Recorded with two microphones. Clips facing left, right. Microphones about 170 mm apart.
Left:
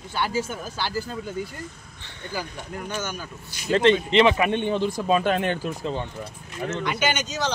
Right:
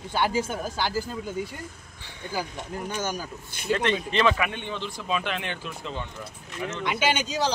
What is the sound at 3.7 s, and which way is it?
Speech, 25° left (ahead or behind).